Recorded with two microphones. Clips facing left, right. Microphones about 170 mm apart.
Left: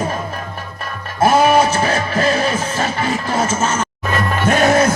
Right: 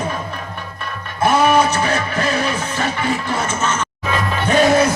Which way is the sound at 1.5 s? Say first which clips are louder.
Left 1 dB; 35° left (ahead or behind).